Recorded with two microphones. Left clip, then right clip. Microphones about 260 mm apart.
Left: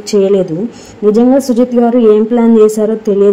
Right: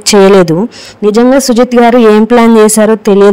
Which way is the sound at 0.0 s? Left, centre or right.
Right.